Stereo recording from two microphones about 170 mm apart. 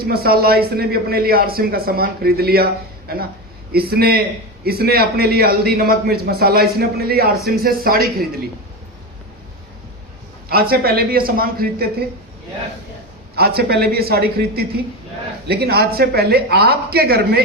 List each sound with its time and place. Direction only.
0.0 s a man's voice: 65° right (ahead or behind)
3.7 s a man's voice: 65° right (ahead or behind)
10.5 s a man's voice: 60° right (ahead or behind)
13.3 s a man's voice: 65° right (ahead or behind)